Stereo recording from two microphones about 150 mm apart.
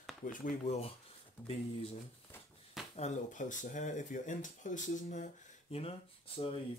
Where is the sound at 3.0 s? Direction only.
55° left (ahead or behind).